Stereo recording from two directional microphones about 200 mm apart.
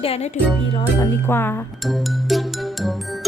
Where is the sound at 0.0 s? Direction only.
30° left (ahead or behind).